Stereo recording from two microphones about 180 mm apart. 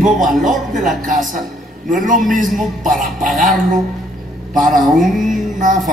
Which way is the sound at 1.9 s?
Centre (ahead or behind).